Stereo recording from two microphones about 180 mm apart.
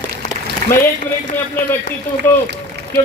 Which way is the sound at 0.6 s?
50° right (ahead or behind).